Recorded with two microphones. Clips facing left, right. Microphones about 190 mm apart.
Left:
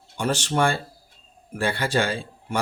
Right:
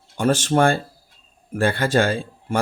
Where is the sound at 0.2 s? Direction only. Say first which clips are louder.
Right 5 dB; 50° right (ahead or behind).